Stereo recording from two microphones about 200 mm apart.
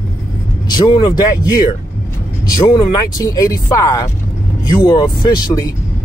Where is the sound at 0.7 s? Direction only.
20° left (ahead or behind).